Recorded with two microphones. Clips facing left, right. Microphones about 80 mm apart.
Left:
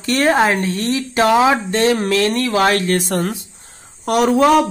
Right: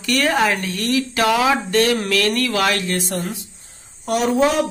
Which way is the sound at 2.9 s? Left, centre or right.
Left.